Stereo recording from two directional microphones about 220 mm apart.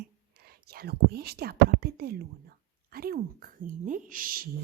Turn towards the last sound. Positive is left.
turn(degrees=-40)  # may be behind; listen again after turning